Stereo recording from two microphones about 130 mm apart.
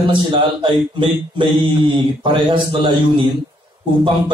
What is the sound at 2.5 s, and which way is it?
Speech, 40° right (ahead or behind).